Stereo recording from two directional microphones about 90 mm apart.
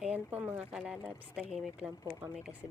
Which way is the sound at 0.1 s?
20° right (ahead or behind).